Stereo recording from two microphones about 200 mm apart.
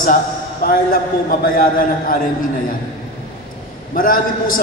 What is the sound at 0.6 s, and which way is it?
A man's voice, 50° left (ahead or behind).